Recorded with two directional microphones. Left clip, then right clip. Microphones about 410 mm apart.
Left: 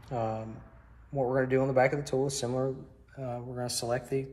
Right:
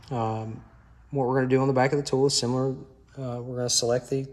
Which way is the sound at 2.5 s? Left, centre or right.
Right.